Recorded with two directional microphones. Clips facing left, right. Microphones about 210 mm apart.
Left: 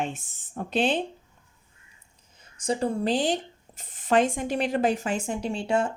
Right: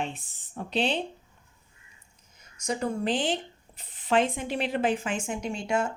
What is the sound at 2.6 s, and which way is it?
Speech, 30° left (ahead or behind).